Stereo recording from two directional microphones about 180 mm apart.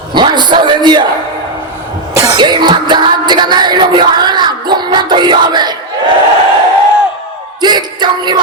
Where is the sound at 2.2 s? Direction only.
20° right (ahead or behind).